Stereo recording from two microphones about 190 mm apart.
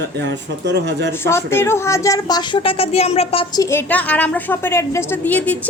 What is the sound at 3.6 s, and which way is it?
A woman's voice, 10° left (ahead or behind).